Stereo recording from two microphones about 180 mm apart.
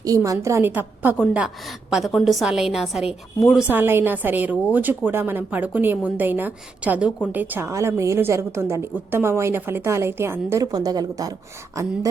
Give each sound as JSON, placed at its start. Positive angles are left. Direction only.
{"t": 0.0, "sound": "a woman's voice", "side_deg": -20}